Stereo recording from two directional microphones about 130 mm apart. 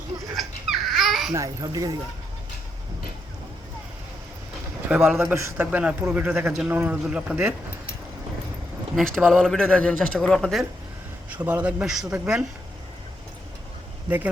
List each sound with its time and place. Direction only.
0.3 s dog: centre (ahead or behind)
1.3 s a child's voice: 30° right (ahead or behind)
4.9 s a man's voice: 10° right (ahead or behind)
9.0 s a man's voice: centre (ahead or behind)
11.4 s a man's voice: 10° right (ahead or behind)